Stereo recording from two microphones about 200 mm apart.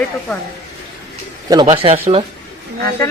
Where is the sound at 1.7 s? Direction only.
30° right (ahead or behind).